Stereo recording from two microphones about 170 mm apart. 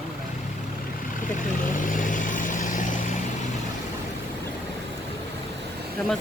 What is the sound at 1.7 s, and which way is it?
Vehicle, 50° left (ahead or behind).